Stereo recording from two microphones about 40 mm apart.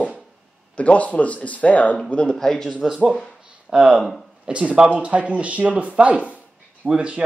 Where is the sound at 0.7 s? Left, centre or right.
Left.